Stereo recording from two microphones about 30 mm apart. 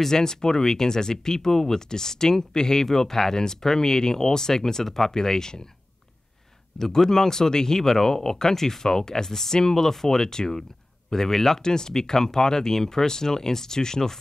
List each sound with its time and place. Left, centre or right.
0.1 s speech: left
6.8 s speech: centre